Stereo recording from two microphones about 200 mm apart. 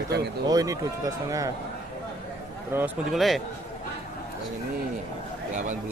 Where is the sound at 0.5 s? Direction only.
15° right (ahead or behind).